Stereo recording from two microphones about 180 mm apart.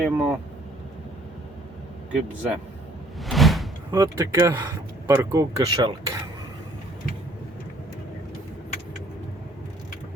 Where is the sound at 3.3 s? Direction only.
Centre (ahead or behind).